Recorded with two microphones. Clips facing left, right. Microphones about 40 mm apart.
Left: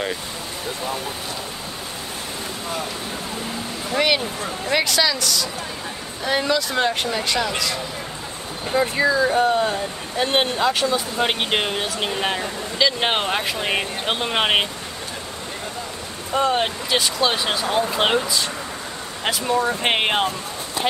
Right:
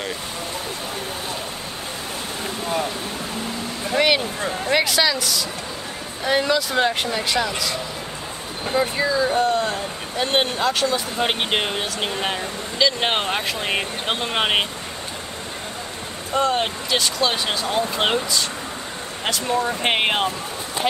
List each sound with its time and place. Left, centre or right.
3.9 s speech: centre
9.0 s speech: left
9.4 s speech: centre
16.3 s speech: centre